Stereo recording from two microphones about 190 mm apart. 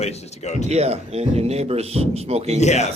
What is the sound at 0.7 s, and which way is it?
A man's voice, 35° right (ahead or behind).